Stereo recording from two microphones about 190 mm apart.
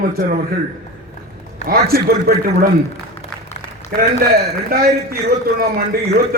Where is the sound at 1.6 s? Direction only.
55° right (ahead or behind).